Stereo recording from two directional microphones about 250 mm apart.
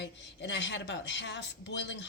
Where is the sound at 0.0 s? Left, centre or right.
Left.